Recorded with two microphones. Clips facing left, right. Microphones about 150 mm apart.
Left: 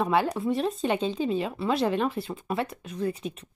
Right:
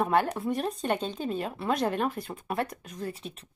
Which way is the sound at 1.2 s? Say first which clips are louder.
Left 4 dB; 45° right (ahead or behind).